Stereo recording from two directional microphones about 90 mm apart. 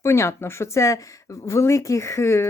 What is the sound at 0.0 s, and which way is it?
Speech, 30° left (ahead or behind).